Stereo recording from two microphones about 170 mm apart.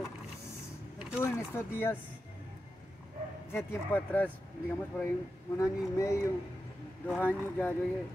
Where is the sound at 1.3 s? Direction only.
15° left (ahead or behind).